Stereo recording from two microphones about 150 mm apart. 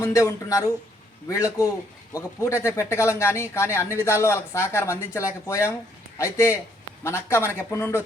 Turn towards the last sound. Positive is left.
turn(degrees=15)  # may be behind; listen again after turning